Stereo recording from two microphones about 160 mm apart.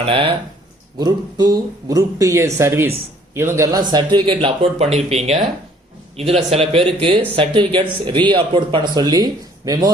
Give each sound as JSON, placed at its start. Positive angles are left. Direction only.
{"t": 0.0, "sound": "a man's voice", "side_deg": -35}